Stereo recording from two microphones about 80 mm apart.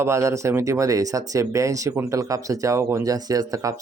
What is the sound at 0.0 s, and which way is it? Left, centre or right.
Speech, right.